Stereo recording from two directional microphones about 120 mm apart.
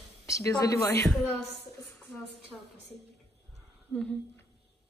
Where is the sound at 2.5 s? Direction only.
5° left (ahead or behind).